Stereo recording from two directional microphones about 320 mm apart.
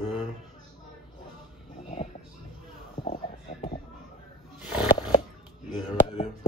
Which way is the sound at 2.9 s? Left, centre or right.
Centre.